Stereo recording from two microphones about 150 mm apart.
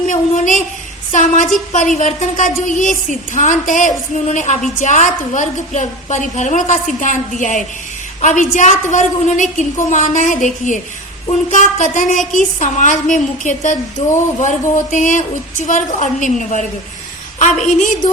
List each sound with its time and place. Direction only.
0.1 s a woman's voice: 60° left (ahead or behind)